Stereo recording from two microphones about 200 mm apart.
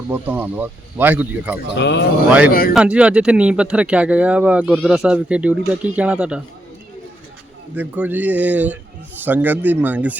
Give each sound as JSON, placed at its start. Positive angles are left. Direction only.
{"t": 0.1, "sound": "speech", "side_deg": -10}
{"t": 1.7, "sound": "speech", "side_deg": 60}
{"t": 2.5, "sound": "speech", "side_deg": 45}
{"t": 2.7, "sound": "speech", "side_deg": -5}
{"t": 7.8, "sound": "speech", "side_deg": -10}